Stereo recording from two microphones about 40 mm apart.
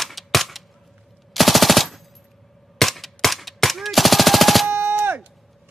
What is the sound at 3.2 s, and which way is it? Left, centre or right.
Machine gun, centre.